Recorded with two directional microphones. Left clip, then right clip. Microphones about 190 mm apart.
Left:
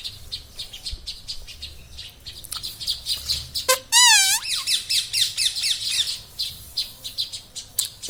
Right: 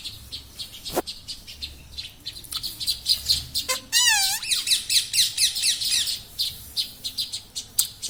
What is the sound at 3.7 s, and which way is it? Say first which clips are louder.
Music: left 6 dB; 45° left (ahead or behind).